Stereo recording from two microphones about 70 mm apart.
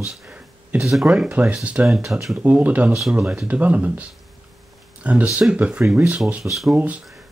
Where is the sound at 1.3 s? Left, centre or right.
Centre.